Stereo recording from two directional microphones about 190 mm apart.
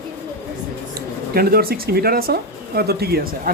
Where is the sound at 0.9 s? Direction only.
55° right (ahead or behind).